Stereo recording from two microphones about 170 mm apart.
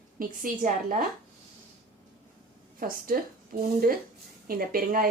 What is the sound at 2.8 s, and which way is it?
Speech, 55° right (ahead or behind).